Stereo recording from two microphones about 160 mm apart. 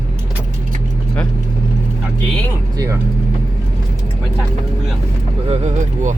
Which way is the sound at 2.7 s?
20° right (ahead or behind).